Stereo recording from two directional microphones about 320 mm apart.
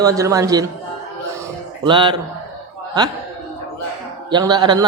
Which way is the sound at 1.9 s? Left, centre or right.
Centre.